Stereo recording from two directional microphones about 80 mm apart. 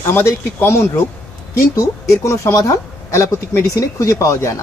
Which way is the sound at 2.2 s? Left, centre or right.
Left.